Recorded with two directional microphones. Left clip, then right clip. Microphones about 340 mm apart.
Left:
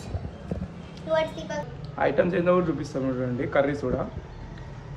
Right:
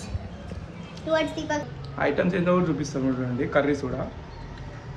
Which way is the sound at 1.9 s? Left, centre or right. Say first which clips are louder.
Left 1 dB; centre.